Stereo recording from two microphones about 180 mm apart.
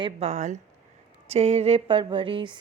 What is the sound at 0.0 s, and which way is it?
A woman's voice, 35° right (ahead or behind).